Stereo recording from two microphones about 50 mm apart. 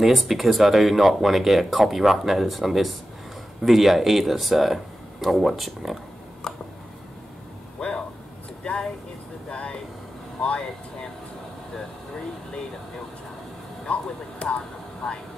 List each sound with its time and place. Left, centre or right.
0.0 s speech: centre
6.4 s a sound: centre
8.6 s vehicle: centre
10.4 s air conditioning: centre
13.9 s a sound: left
14.4 s vehicle: left